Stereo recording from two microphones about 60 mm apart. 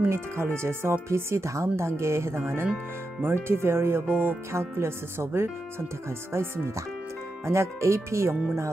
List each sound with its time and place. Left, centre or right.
0.1 s speech: right
4.5 s speech: right